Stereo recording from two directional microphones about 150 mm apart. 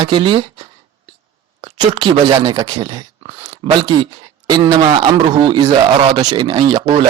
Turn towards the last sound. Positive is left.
turn(degrees=-30)  # may be behind; listen again after turning